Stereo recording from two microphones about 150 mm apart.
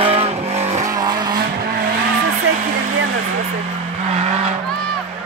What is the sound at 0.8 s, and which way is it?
Vehicle, 25° right (ahead or behind).